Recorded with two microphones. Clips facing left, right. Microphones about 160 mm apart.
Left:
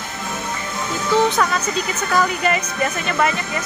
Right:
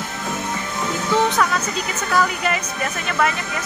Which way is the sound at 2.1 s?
Centre (ahead or behind).